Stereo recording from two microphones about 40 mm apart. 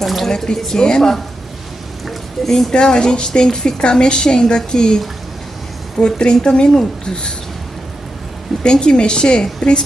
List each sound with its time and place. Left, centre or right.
0.0 s speech: centre
0.3 s a woman's voice: centre
2.0 s a sound: centre
2.7 s a woman's voice: left
8.6 s a woman's voice: left